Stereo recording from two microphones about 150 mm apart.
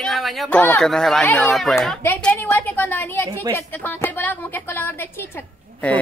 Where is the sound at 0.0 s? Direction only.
Centre (ahead or behind).